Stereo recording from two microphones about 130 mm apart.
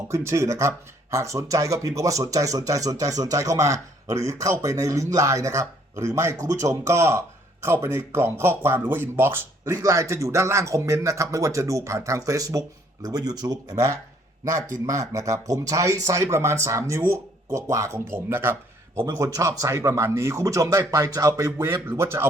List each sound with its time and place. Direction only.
0.1 s speech: 20° right (ahead or behind)